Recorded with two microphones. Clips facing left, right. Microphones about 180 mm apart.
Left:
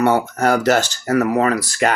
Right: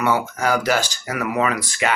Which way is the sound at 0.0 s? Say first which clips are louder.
Left 4 dB; 55° left (ahead or behind).